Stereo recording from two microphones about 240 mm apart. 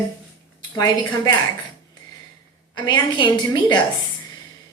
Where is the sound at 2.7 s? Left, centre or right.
Centre.